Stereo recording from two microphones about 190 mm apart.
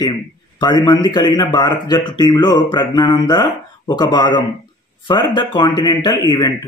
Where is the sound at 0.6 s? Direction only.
20° left (ahead or behind).